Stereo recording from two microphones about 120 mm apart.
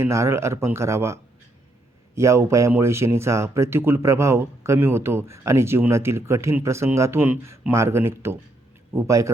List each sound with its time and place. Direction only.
0.0 s speech: 25° right (ahead or behind)